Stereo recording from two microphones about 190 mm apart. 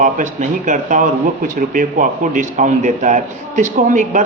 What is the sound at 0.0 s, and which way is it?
A man's voice, 40° right (ahead or behind).